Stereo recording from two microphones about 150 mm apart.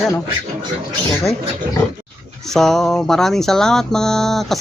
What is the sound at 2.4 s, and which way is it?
Music, 5° left (ahead or behind).